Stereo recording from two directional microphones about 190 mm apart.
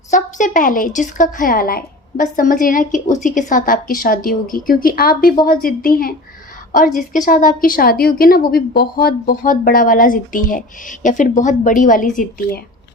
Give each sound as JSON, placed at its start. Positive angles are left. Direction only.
{"t": 0.1, "sound": "a woman's voice", "side_deg": 40}